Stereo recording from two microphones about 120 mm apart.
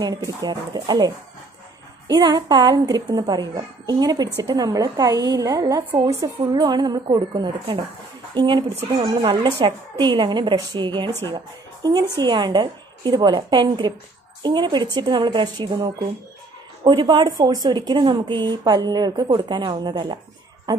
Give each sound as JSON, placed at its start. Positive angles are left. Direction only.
{"t": 0.0, "sound": "a child's voice", "side_deg": -30}
{"t": 16.8, "sound": "a child's voice", "side_deg": -40}